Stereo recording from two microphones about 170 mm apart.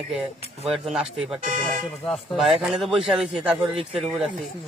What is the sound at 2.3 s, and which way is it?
A man's voice, centre (ahead or behind).